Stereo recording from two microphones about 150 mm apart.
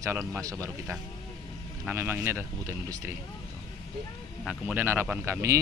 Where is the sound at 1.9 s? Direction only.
15° right (ahead or behind).